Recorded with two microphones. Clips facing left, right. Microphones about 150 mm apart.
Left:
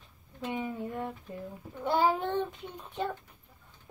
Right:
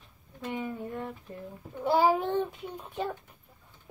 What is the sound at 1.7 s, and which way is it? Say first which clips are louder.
A child's voice: right 3 dB; 5° right (ahead or behind).